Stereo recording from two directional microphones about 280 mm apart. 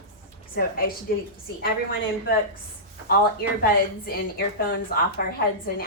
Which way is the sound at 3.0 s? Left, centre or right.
Left.